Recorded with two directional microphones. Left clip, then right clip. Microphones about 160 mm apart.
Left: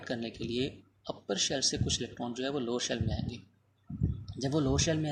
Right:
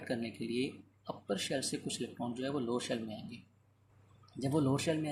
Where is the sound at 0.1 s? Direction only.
30° left (ahead or behind).